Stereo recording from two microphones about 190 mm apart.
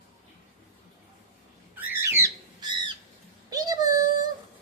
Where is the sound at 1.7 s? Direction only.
10° right (ahead or behind).